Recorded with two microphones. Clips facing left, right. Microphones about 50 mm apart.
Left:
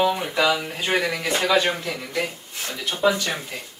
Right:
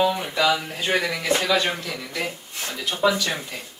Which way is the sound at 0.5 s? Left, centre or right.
Centre.